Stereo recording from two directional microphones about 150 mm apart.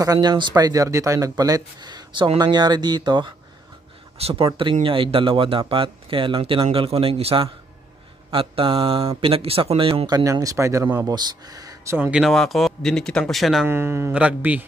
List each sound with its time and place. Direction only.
0.0 s speech: 25° right (ahead or behind)
4.2 s speech: 40° right (ahead or behind); by 12.1 s 20° right (ahead or behind)
12.1 s speech: centre (ahead or behind)
13.7 s speech: 15° right (ahead or behind)